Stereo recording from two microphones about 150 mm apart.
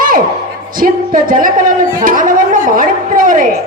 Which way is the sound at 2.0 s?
65° right (ahead or behind).